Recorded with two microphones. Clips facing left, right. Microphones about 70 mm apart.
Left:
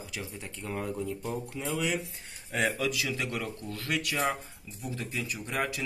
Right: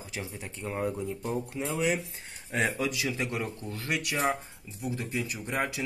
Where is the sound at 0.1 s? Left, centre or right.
Centre.